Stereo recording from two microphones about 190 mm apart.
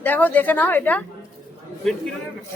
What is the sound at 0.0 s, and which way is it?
A man's voice, 10° left (ahead or behind).